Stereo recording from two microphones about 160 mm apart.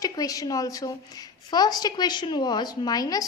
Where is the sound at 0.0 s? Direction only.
20° left (ahead or behind).